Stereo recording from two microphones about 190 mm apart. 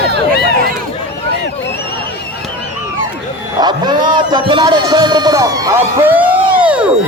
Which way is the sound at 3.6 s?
20° right (ahead or behind).